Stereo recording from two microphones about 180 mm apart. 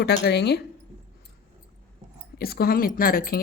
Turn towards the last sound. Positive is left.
turn(degrees=55)  # may be behind; listen again after turning